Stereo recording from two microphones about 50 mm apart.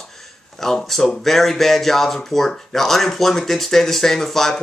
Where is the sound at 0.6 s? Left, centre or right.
Centre.